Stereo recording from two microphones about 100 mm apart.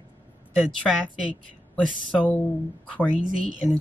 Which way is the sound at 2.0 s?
15° left (ahead or behind).